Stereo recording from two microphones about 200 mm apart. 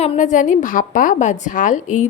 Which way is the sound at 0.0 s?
35° left (ahead or behind).